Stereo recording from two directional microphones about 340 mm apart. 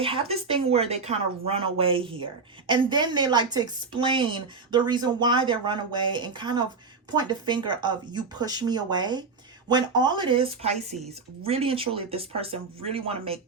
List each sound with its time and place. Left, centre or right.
0.0 s a woman's voice: centre